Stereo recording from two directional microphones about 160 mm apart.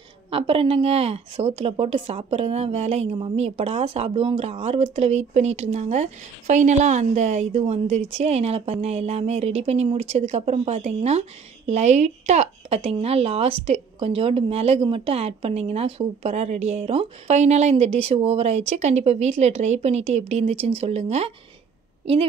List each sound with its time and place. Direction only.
0.3 s a woman's voice: 35° right (ahead or behind)